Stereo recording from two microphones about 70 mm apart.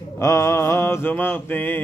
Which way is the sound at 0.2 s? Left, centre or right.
Left.